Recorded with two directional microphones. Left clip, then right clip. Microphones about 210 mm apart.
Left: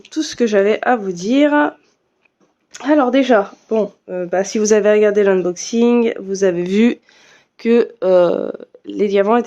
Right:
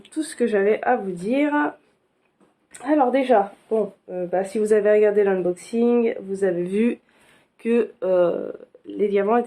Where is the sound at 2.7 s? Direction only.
45° left (ahead or behind).